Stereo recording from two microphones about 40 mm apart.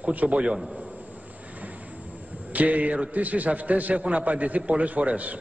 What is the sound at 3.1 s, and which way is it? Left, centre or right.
A man's voice, right.